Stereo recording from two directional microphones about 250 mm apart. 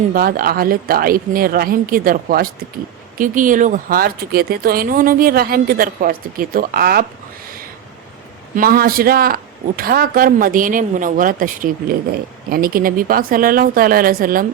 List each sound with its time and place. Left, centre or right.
0.1 s speech: right
8.5 s speech: right